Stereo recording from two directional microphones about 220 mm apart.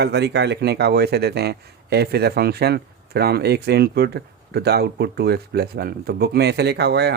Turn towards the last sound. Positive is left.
turn(degrees=-50)  # may be behind; listen again after turning